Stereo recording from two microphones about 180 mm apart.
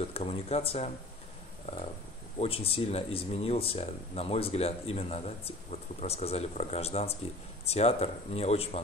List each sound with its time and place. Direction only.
0.1 s speech: 35° left (ahead or behind)